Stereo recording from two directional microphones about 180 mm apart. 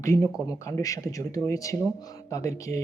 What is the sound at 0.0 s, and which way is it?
Speech, 15° left (ahead or behind).